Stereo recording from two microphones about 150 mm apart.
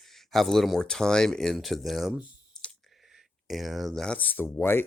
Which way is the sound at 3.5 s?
Centre (ahead or behind).